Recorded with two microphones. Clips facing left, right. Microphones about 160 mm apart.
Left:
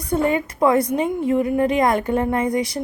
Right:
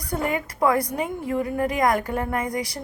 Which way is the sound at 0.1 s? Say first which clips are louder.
Left 6 dB; 25° left (ahead or behind).